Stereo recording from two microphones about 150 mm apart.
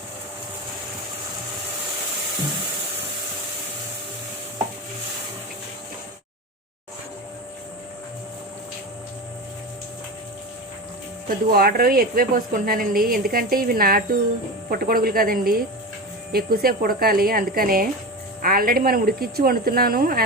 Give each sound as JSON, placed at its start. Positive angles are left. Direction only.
{"t": 11.3, "sound": "a woman's voice", "side_deg": -80}
{"t": 16.3, "sound": "speech", "side_deg": -85}